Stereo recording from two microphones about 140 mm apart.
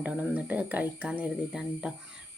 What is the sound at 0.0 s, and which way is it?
A woman's voice, 10° right (ahead or behind).